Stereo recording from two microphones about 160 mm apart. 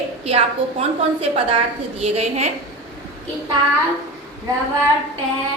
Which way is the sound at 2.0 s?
45° right (ahead or behind).